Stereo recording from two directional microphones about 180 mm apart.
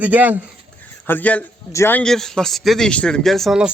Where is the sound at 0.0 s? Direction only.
10° right (ahead or behind).